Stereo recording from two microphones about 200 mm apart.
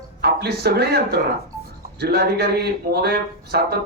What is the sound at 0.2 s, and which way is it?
Speech, 55° right (ahead or behind).